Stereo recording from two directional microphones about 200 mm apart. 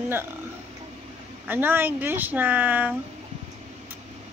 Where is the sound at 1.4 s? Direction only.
10° right (ahead or behind).